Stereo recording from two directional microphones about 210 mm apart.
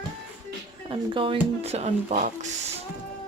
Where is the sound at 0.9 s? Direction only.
25° right (ahead or behind).